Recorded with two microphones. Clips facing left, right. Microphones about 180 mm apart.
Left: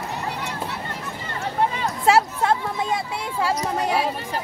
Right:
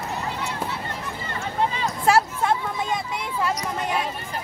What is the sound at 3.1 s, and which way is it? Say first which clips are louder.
Speech: left 2 dB; 30° left (ahead or behind).